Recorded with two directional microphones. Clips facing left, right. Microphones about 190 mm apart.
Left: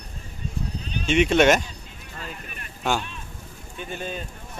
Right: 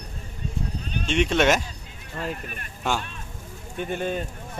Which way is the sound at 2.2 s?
55° right (ahead or behind).